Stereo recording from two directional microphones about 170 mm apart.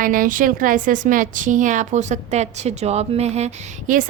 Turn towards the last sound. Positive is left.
turn(degrees=-45)  # may be behind; listen again after turning